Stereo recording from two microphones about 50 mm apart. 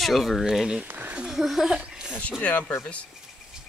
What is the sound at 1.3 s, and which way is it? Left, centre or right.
Speech, centre.